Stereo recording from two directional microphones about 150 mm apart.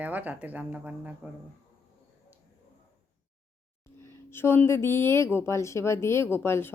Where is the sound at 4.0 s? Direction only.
15° left (ahead or behind).